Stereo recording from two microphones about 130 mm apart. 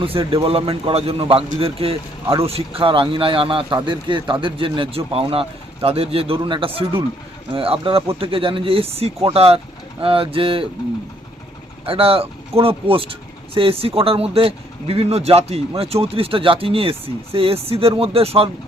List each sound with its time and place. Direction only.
0.0 s speech: 45° right (ahead or behind)
11.9 s speech: 45° right (ahead or behind)